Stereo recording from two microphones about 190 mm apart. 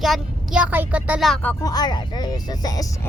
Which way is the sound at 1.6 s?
20° left (ahead or behind).